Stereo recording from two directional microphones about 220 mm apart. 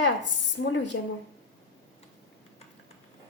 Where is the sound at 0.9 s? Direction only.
55° left (ahead or behind).